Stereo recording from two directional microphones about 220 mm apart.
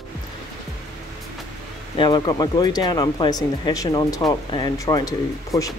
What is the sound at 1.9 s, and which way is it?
Speech, 20° left (ahead or behind).